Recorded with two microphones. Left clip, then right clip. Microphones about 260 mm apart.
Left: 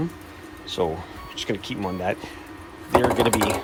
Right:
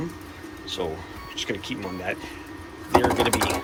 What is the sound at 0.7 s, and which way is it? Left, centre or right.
Speech, centre.